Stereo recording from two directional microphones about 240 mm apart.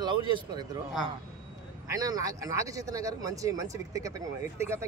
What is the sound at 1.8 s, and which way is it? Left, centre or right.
Speech, centre.